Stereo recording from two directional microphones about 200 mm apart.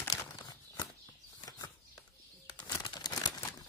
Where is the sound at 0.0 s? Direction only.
15° left (ahead or behind).